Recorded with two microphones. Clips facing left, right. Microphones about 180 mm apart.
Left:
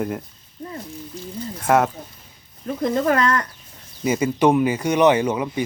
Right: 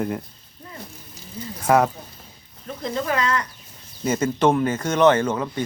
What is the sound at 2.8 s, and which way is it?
Speech, 45° left (ahead or behind).